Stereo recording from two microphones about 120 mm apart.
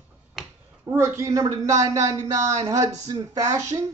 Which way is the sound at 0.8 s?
20° right (ahead or behind).